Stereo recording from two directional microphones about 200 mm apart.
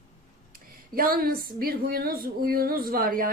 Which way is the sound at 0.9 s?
45° right (ahead or behind).